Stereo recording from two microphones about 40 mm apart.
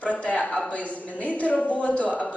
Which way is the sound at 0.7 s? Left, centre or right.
Left.